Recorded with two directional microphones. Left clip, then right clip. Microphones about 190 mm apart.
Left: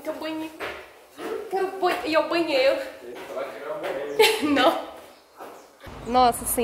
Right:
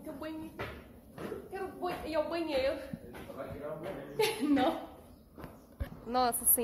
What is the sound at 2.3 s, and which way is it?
Speech, 10° right (ahead or behind).